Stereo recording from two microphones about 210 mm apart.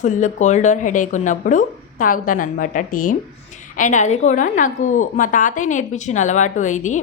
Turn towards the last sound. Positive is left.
turn(degrees=35)  # may be behind; listen again after turning